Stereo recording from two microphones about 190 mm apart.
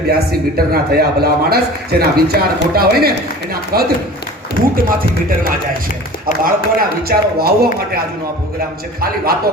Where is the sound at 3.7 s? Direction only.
50° right (ahead or behind).